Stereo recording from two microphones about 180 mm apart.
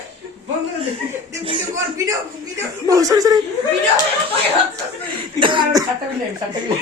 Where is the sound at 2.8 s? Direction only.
20° right (ahead or behind).